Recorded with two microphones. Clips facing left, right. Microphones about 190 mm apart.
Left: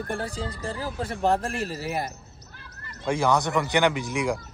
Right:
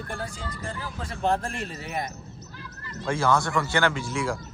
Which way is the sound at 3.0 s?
15° left (ahead or behind).